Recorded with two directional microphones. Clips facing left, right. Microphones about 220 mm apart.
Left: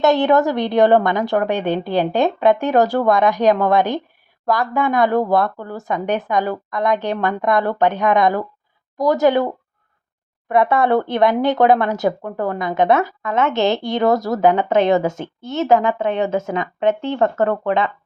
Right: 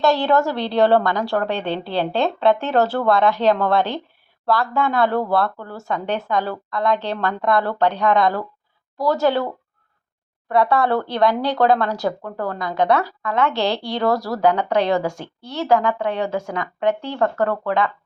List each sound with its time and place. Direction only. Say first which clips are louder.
0.0 s a woman's voice: left 3 dB; 20° left (ahead or behind)
10.5 s speech: left 2 dB; 20° left (ahead or behind)